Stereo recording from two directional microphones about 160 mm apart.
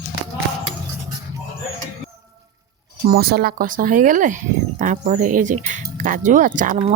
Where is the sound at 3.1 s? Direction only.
75° right (ahead or behind); by 6.7 s 55° right (ahead or behind).